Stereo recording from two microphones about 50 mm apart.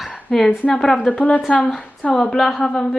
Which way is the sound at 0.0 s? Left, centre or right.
Centre.